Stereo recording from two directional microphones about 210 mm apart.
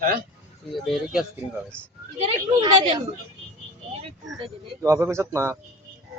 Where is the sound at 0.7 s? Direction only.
Centre (ahead or behind).